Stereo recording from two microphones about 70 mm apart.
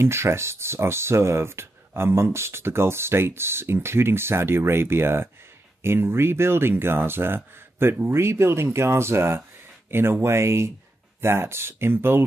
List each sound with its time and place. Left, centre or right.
0.0 s speech: right